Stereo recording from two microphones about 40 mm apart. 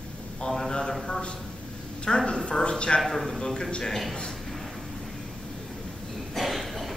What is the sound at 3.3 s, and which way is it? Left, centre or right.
Speech, centre.